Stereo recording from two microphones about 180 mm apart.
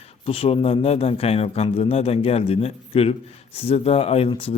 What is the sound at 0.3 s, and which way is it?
A man's voice, 35° left (ahead or behind).